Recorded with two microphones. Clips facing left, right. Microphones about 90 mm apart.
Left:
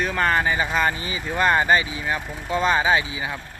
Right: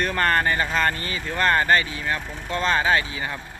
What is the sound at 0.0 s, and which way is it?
Speech, centre (ahead or behind).